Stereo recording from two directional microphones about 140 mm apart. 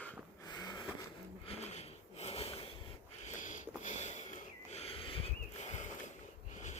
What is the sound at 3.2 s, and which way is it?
Sniff, 60° left (ahead or behind).